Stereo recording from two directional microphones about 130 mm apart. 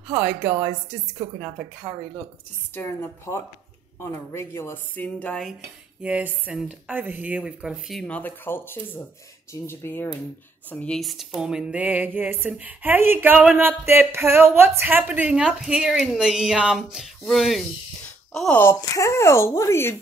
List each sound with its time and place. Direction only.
0.1 s speech: 10° right (ahead or behind)
1.1 s a woman's voice: 5° right (ahead or behind)
2.7 s speech: 20° left (ahead or behind)
6.0 s speech: 10° right (ahead or behind)
8.1 s a woman's voice: 15° left (ahead or behind)
18.6 s speech: 20° left (ahead or behind)